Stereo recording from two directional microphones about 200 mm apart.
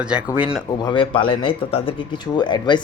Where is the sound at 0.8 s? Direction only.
25° left (ahead or behind).